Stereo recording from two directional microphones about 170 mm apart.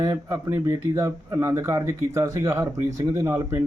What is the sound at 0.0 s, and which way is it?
A man's voice, 20° right (ahead or behind).